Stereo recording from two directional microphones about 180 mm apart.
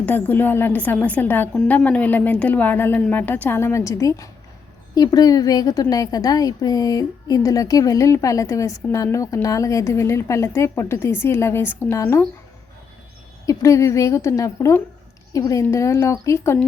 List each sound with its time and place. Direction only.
0.0 s a woman's voice: 10° left (ahead or behind)
13.4 s a woman's voice: 15° left (ahead or behind)